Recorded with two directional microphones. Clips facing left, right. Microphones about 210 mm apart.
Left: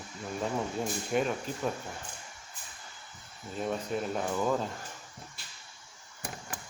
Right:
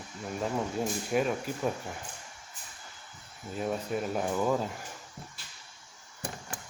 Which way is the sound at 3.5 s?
5° right (ahead or behind).